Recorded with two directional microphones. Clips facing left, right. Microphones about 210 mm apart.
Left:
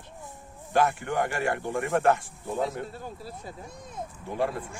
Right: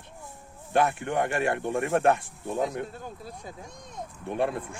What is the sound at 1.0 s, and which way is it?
Speech, 25° right (ahead or behind).